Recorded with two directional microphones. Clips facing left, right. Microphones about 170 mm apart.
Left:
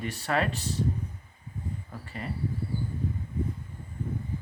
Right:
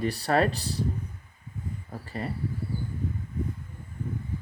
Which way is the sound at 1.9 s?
35° right (ahead or behind).